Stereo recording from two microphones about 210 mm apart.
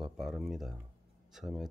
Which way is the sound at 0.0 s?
Centre (ahead or behind).